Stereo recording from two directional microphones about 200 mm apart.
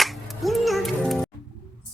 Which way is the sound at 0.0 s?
Centre (ahead or behind).